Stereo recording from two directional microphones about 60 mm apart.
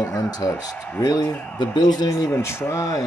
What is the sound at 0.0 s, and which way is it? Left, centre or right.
Speech, left.